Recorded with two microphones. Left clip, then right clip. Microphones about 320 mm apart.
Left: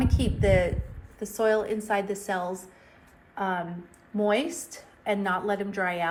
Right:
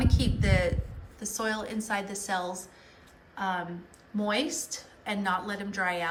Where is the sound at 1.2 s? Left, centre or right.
Centre.